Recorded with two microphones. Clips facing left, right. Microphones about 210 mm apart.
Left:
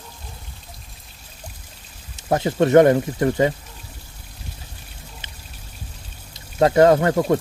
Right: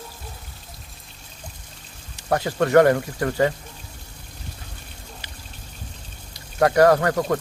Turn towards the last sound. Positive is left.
turn(degrees=25)  # may be behind; listen again after turning